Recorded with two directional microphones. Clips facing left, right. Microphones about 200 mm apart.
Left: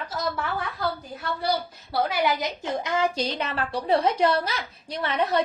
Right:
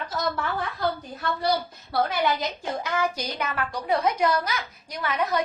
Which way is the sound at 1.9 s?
10° left (ahead or behind).